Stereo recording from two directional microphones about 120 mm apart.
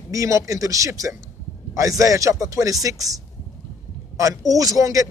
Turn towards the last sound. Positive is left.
turn(degrees=-25)  # may be behind; listen again after turning